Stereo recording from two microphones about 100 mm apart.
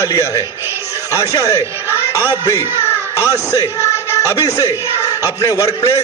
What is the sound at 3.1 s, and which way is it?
A man's voice, 30° left (ahead or behind).